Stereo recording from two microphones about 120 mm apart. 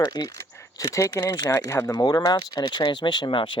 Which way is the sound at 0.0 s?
35° left (ahead or behind).